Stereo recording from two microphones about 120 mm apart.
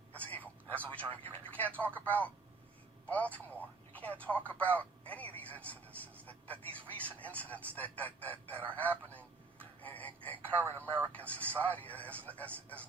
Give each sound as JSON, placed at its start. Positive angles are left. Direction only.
{"t": 0.2, "sound": "a sound", "side_deg": 15}
{"t": 0.9, "sound": "telephone", "side_deg": 15}
{"t": 2.0, "sound": "speech", "side_deg": 10}
{"t": 9.0, "sound": "a sound", "side_deg": 15}
{"t": 10.8, "sound": "speech", "side_deg": -20}
{"t": 11.1, "sound": "speech", "side_deg": 10}